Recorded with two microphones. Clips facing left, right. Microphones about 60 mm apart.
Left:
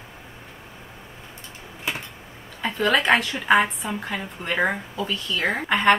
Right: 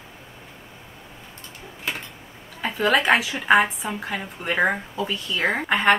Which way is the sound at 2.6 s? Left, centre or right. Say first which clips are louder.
Right 1 dB; centre.